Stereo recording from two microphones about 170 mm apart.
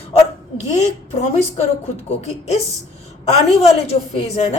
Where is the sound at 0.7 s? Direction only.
40° left (ahead or behind).